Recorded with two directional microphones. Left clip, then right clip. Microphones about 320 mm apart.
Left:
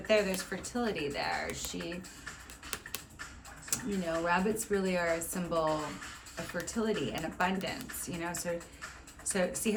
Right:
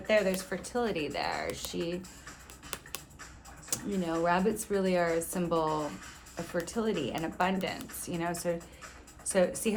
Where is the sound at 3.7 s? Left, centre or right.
Centre.